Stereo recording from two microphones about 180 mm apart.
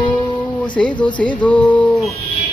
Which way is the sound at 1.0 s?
5° left (ahead or behind).